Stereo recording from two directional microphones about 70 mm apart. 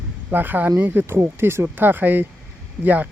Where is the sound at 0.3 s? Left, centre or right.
Right.